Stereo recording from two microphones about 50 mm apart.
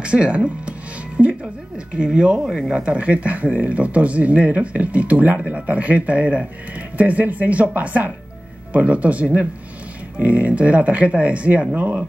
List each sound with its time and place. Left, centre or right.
0.0 s music: right
2.0 s speech: centre